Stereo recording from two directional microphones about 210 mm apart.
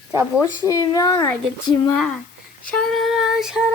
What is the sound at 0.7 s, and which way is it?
Speech, 15° left (ahead or behind).